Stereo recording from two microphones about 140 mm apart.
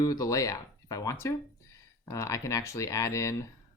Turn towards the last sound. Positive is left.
turn(degrees=25)  # may be behind; listen again after turning